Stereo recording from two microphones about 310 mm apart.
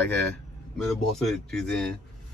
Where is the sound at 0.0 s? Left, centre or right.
Centre.